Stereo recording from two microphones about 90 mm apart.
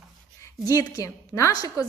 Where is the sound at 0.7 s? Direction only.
40° left (ahead or behind).